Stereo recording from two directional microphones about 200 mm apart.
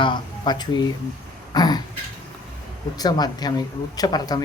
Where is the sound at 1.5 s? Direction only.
20° left (ahead or behind).